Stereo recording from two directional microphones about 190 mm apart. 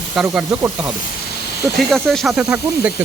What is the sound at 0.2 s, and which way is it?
Speech, 5° right (ahead or behind).